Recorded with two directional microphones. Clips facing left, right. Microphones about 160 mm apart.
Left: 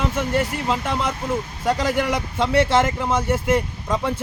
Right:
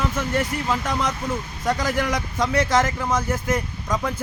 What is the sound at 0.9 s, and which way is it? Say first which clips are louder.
Speech: left 1 dB; 5° left (ahead or behind).